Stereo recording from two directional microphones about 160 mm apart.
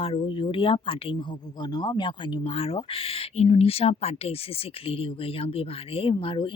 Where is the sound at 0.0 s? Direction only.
35° left (ahead or behind).